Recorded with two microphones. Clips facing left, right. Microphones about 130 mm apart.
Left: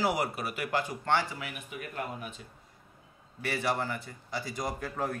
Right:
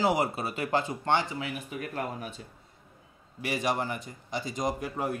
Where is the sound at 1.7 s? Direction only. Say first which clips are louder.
Right 3 dB; 40° right (ahead or behind).